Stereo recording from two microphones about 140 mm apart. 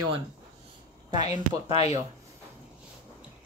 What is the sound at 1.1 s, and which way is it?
Speech, 55° left (ahead or behind).